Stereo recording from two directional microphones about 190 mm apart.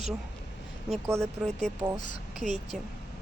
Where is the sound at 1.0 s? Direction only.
15° right (ahead or behind).